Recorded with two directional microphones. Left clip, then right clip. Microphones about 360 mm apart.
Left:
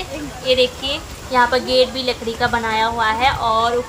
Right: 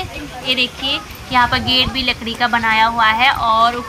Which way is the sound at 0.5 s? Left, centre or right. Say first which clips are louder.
Left 1 dB; centre.